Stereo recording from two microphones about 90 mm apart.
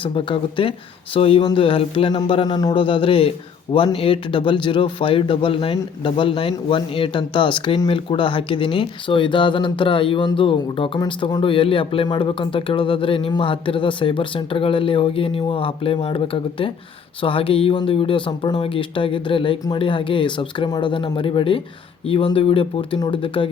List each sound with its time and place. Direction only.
0.0 s speech: 70° left (ahead or behind)
2.0 s speech: 60° left (ahead or behind)
2.7 s speech: 70° left (ahead or behind)
12.0 s speech: 65° left (ahead or behind)
22.0 s speech: 90° left
23.0 s speech: 65° left (ahead or behind)